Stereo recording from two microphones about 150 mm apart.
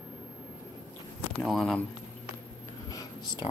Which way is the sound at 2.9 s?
25° left (ahead or behind).